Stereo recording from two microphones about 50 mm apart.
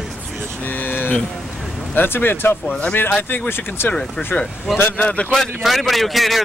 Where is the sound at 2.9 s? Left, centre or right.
Left.